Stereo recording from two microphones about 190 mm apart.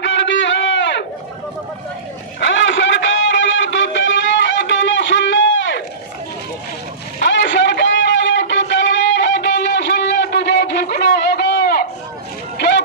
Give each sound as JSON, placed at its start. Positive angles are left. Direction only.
{"t": 0.0, "sound": "a sound", "side_deg": 70}
{"t": 2.4, "sound": "music", "side_deg": 75}
{"t": 7.2, "sound": "music", "side_deg": 70}
{"t": 12.5, "sound": "run", "side_deg": 65}